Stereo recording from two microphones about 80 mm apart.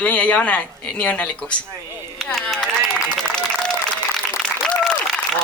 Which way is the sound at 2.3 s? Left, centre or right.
Centre.